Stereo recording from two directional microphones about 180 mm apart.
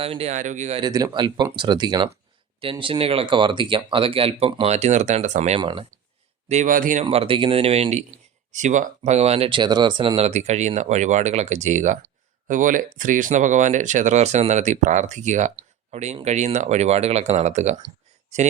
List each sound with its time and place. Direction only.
0.0 s speech: 35° right (ahead or behind)
0.8 s speech: 20° right (ahead or behind); by 5.5 s 40° right (ahead or behind)
5.5 s speech: 25° right (ahead or behind)
6.5 s speech: 45° right (ahead or behind)
7.0 s speech: 30° right (ahead or behind)